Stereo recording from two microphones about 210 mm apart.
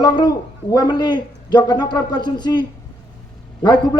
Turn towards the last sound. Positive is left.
turn(degrees=20)  # may be behind; listen again after turning